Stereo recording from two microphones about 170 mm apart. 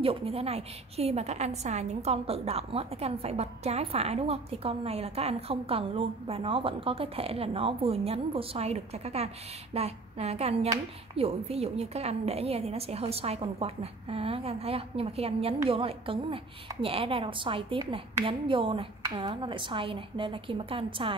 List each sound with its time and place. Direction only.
0.0 s a woman's voice: 35° right (ahead or behind)